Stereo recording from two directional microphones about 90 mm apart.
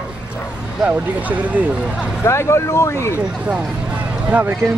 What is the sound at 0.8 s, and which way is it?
Speech, 15° right (ahead or behind).